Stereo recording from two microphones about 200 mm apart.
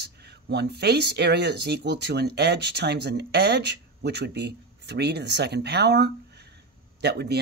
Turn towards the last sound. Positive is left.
turn(degrees=-55)  # may be behind; listen again after turning